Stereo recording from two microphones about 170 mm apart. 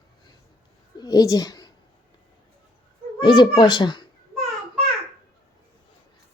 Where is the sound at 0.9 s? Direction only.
25° left (ahead or behind).